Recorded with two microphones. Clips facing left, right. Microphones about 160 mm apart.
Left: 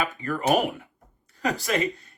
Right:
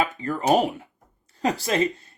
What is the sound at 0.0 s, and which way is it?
Speech, 20° right (ahead or behind).